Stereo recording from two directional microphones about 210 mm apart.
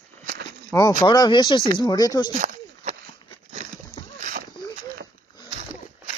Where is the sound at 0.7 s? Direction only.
20° left (ahead or behind).